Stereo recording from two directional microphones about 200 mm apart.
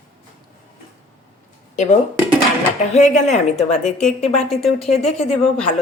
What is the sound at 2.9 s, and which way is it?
Speech, 35° left (ahead or behind).